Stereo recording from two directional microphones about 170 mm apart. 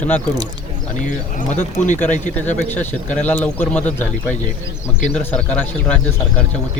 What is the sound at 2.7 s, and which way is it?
Speech, 10° left (ahead or behind).